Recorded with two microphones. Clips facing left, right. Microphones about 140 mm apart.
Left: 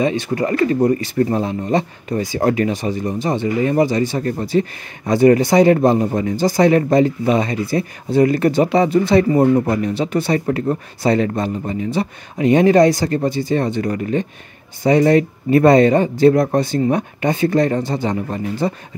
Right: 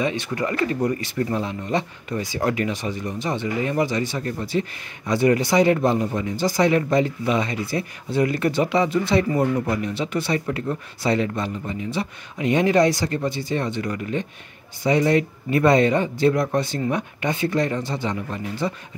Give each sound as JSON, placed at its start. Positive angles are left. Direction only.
{"t": 0.0, "sound": "speech", "side_deg": 40}